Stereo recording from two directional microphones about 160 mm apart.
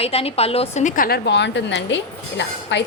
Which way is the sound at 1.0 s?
85° left.